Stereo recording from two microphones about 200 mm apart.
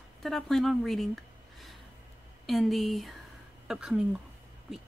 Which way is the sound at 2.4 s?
Centre (ahead or behind).